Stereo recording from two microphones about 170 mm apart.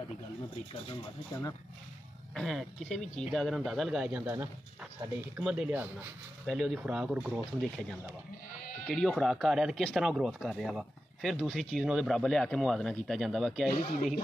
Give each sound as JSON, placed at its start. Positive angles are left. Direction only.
{"t": 0.8, "sound": "speech", "side_deg": 20}
{"t": 2.3, "sound": "speech", "side_deg": 0}
{"t": 7.6, "sound": "speech", "side_deg": 5}
{"t": 13.7, "sound": "speech", "side_deg": 50}